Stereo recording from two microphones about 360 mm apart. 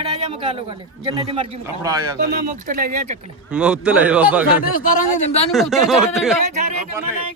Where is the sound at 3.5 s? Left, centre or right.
Centre.